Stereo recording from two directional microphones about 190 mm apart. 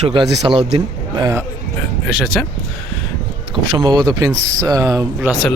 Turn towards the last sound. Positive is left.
turn(degrees=-15)  # may be behind; listen again after turning